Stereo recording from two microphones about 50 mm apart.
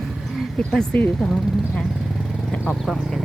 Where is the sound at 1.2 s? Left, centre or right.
Centre.